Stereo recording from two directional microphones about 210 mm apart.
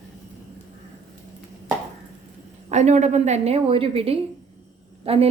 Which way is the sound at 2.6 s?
35° right (ahead or behind).